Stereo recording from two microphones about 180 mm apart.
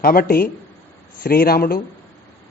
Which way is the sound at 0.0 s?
55° left (ahead or behind).